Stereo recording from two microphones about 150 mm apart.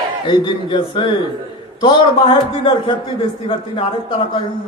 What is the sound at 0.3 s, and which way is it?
A man's voice, 35° left (ahead or behind).